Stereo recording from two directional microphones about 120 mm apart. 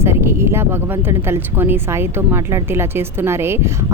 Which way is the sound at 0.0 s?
20° right (ahead or behind).